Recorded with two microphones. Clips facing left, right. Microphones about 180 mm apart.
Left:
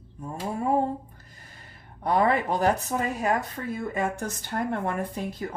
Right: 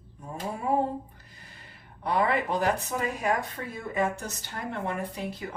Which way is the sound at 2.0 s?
40° left (ahead or behind).